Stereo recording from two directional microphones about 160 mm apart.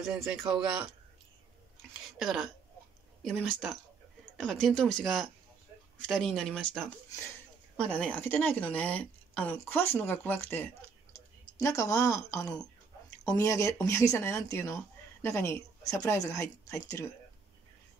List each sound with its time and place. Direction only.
0.2 s speech: 15° right (ahead or behind)
2.1 s speech: centre (ahead or behind)
7.9 s speech: 10° left (ahead or behind)